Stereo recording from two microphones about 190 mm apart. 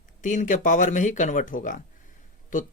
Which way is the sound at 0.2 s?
40° left (ahead or behind).